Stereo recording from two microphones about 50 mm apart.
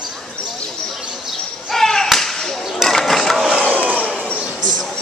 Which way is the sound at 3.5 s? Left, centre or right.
Left.